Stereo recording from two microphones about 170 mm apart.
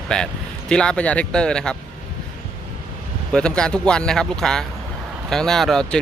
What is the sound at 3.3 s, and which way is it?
Speech, 5° left (ahead or behind).